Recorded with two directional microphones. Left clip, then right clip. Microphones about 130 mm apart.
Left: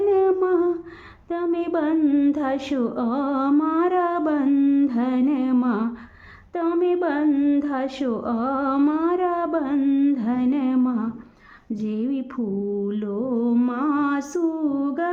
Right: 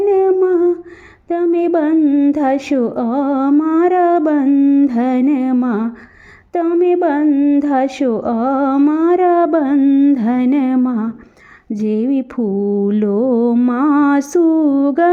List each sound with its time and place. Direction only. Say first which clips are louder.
0.1 s humming: right 7 dB; 35° right (ahead or behind)
1.3 s a sound: right 9 dB; 40° right (ahead or behind)
2.0 s humming: right 7 dB; 25° right (ahead or behind)
2.3 s mantra: right 9 dB; 40° right (ahead or behind)
4.4 s humming: right 7 dB; 25° right (ahead or behind)
4.9 s mantra: right 7 dB; 45° right (ahead or behind)
7.3 s humming: right 7 dB; 25° right (ahead or behind)
7.6 s mantra: right 10 dB; 45° right (ahead or behind)
9.7 s a sound: right 6 dB; 35° right (ahead or behind)
10.2 s music: right 8 dB; 60° right (ahead or behind)
10.8 s mantra: right 6 dB; 55° right (ahead or behind)
13.5 s a sound: right 7 dB; 40° right (ahead or behind)
13.7 s music: right 9 dB; 80° right; by 15.1 s 65° right (ahead or behind)